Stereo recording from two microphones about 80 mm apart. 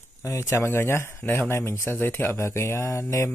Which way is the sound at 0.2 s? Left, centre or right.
Left.